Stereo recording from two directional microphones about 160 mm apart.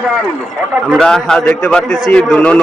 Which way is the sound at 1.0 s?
5° left (ahead or behind).